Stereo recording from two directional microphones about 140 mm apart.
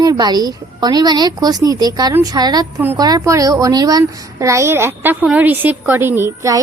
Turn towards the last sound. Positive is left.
turn(degrees=-20)  # may be behind; listen again after turning